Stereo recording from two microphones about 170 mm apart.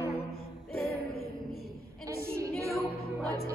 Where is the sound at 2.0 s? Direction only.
15° right (ahead or behind).